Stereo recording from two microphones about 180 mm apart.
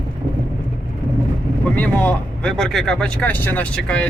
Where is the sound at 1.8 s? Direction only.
10° left (ahead or behind).